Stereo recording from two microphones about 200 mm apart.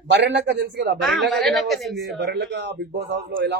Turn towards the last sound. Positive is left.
turn(degrees=-55)  # may be behind; listen again after turning